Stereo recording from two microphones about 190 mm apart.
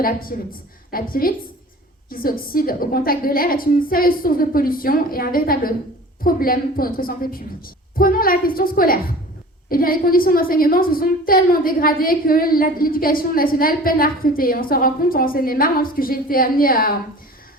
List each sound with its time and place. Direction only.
0.0 s a woman's voice: 50° left (ahead or behind)